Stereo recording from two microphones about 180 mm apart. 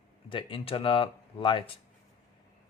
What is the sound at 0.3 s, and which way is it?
Speech, 30° left (ahead or behind).